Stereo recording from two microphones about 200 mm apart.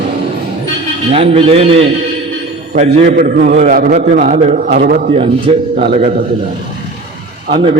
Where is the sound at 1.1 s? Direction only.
30° right (ahead or behind).